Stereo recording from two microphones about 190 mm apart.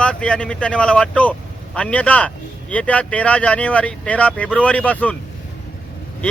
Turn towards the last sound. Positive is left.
turn(degrees=5)  # may be behind; listen again after turning